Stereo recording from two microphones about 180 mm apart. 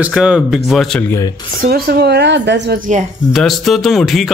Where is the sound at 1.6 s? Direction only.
60° right (ahead or behind).